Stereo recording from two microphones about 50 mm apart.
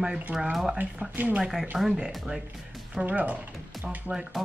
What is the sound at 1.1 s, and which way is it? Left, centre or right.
Speech, right.